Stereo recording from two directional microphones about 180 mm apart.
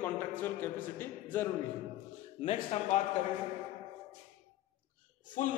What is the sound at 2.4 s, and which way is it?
Speech, 35° left (ahead or behind).